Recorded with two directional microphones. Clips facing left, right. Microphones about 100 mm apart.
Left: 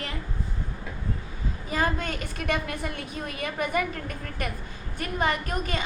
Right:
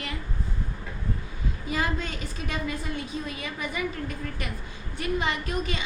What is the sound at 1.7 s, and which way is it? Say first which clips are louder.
A woman's voice: left 2 dB; 50° left (ahead or behind).